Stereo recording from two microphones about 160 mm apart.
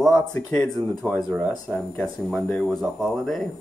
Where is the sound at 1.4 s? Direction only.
5° left (ahead or behind).